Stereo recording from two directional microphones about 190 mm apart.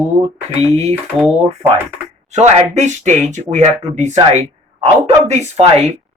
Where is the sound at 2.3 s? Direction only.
35° right (ahead or behind).